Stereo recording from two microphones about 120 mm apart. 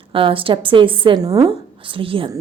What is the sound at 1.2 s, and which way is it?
Speech, 30° right (ahead or behind).